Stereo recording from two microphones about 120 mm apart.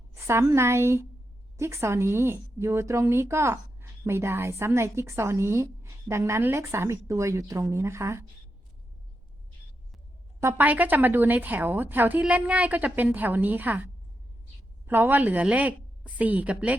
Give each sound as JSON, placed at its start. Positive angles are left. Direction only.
{"t": 0.1, "sound": "a woman's voice", "side_deg": -20}
{"t": 10.4, "sound": "a woman's voice", "side_deg": -15}